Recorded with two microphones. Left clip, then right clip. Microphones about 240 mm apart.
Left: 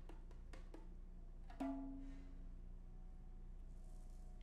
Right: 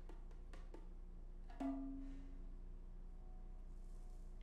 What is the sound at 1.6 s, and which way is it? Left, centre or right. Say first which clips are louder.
Music: right 1 dB; left.